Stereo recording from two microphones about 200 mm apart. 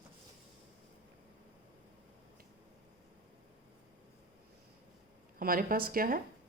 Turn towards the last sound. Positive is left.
turn(degrees=-45)  # may be behind; listen again after turning